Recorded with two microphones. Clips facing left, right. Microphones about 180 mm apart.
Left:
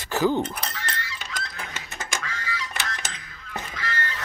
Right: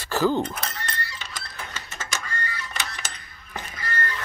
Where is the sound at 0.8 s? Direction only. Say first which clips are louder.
Even; 90° left.